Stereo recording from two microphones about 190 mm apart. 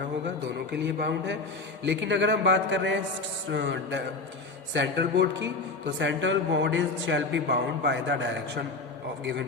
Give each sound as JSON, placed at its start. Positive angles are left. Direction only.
{"t": 0.7, "sound": "a man's voice", "side_deg": -60}